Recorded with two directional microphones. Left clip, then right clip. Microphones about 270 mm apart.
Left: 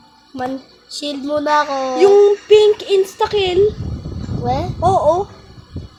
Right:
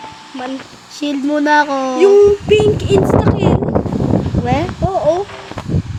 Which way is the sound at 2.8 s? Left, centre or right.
Centre.